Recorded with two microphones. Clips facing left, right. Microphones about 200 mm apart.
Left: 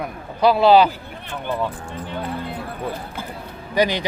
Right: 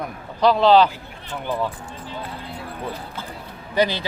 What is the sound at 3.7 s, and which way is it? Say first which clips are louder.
Speech: left 1 dB; 15° left (ahead or behind).